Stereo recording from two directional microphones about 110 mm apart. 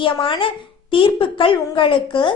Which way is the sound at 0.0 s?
50° left (ahead or behind).